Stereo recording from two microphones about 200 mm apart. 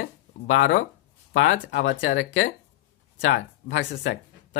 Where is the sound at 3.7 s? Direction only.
65° left (ahead or behind).